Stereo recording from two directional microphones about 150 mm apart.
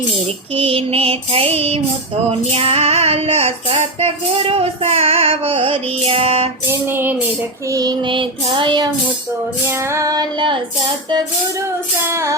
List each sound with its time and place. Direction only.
0.6 s child singing: 40° right (ahead or behind)
6.7 s music: 15° right (ahead or behind)
7.7 s child singing: 25° right (ahead or behind)
9.6 s female singing: 20° right (ahead or behind)
12.0 s female singing: 20° right (ahead or behind)